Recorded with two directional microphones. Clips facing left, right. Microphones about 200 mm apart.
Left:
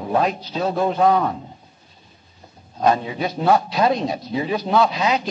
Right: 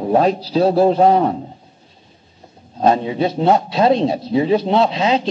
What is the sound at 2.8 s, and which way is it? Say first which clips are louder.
A man's voice: right 4 dB; 25° right (ahead or behind).